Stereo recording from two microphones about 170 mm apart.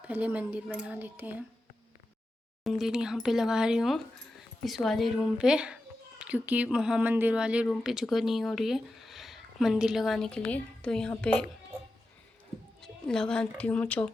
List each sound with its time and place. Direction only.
0.0 s speech: 10° right (ahead or behind)
2.6 s a woman's voice: centre (ahead or behind)
12.8 s speech: 5° left (ahead or behind)